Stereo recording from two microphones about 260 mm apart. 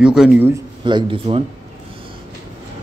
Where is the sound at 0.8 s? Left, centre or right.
Centre.